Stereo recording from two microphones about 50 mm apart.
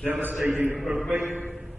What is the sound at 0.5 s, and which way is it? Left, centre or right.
Speech, right.